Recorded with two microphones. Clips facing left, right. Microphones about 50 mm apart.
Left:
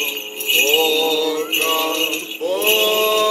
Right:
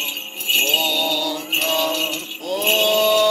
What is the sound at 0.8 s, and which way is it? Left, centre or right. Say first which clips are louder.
Mantra: left 5 dB; left.